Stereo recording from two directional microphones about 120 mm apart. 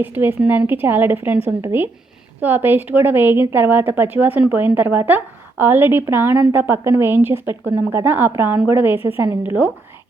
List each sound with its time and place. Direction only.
0.0 s a woman's voice: 15° right (ahead or behind)